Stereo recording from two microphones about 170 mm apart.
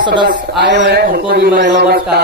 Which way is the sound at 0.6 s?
85° right.